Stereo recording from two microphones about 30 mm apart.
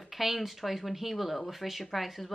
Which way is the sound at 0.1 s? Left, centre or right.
Centre.